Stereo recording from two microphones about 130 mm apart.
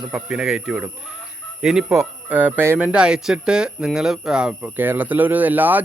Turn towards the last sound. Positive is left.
turn(degrees=-15)  # may be behind; listen again after turning